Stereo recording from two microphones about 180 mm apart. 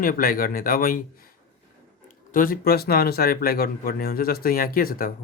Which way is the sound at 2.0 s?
50° left (ahead or behind).